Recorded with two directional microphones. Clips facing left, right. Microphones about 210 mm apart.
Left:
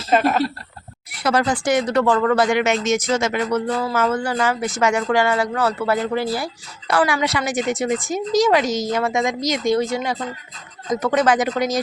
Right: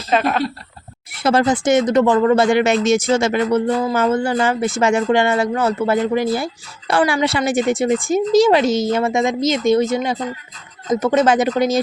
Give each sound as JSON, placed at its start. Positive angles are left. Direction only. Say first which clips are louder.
{"t": 0.1, "sound": "speech", "louder": "even", "side_deg": 5}
{"t": 1.2, "sound": "speech", "louder": "right 4 dB", "side_deg": -25}